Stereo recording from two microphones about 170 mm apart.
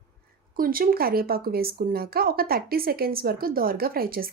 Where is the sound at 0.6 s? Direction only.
60° right (ahead or behind).